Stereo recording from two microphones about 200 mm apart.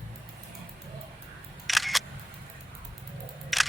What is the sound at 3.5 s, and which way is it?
Single-lens reflex camera, centre (ahead or behind).